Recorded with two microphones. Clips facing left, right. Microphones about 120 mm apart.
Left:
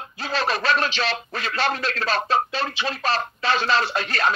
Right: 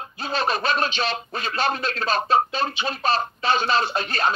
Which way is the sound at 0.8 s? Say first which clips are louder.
Even; 30° right (ahead or behind).